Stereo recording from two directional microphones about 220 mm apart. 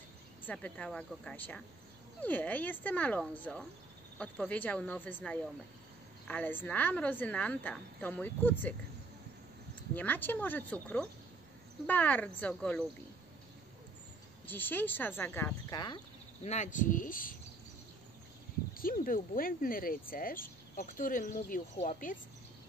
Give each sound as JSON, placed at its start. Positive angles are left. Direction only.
{"t": 0.5, "sound": "a woman's voice", "side_deg": 5}
{"t": 9.9, "sound": "a woman's voice", "side_deg": 10}
{"t": 14.4, "sound": "a woman's voice", "side_deg": 10}
{"t": 16.4, "sound": "speech", "side_deg": 35}
{"t": 18.8, "sound": "speech", "side_deg": 40}